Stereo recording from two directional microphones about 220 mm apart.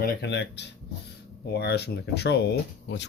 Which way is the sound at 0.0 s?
50° left (ahead or behind).